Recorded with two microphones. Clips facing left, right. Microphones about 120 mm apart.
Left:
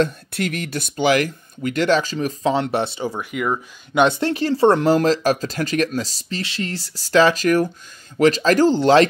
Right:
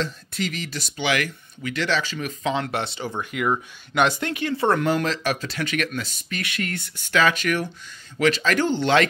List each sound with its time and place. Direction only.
0.0 s speech: 55° left (ahead or behind); by 2.6 s 35° left (ahead or behind)
2.6 s speech: 25° left (ahead or behind)
3.1 s speech: 10° left (ahead or behind)
3.9 s speech: 20° left (ahead or behind)